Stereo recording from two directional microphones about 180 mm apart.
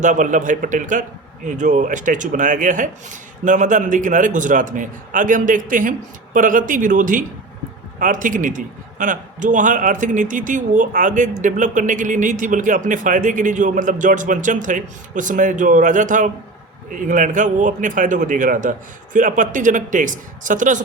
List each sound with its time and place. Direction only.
0.0 s a man's voice: 45° right (ahead or behind)